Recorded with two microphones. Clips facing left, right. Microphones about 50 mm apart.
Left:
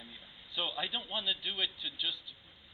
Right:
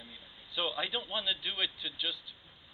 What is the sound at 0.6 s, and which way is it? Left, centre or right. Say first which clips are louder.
A man's voice: right 2 dB; right.